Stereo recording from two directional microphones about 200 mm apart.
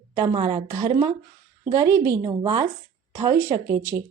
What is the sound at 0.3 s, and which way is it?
A woman's voice, 25° right (ahead or behind).